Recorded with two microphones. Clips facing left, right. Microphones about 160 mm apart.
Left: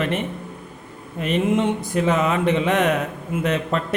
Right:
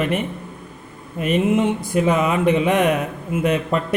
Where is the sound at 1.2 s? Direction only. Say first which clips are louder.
Right 2 dB; 10° right (ahead or behind).